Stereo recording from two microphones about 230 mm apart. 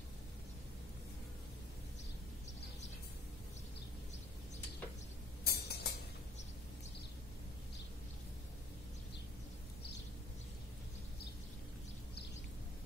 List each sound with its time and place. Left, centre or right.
5.4 s music: left